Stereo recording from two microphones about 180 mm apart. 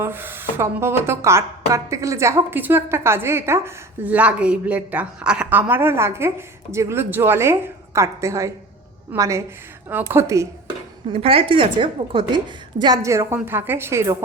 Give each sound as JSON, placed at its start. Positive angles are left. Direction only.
{"t": 0.0, "sound": "a woman's voice", "side_deg": -10}
{"t": 11.1, "sound": "a woman's voice", "side_deg": -30}